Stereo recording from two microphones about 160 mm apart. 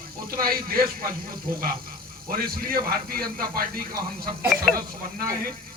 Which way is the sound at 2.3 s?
65° right (ahead or behind).